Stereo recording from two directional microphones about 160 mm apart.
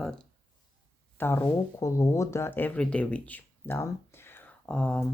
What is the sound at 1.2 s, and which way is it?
Speech, 15° left (ahead or behind).